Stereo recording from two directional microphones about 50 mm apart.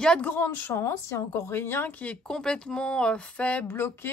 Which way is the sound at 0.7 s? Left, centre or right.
Left.